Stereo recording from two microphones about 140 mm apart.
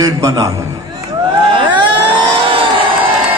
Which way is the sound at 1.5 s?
40° right (ahead or behind).